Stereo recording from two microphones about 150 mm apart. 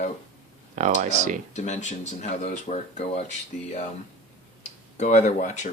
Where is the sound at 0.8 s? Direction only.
55° right (ahead or behind).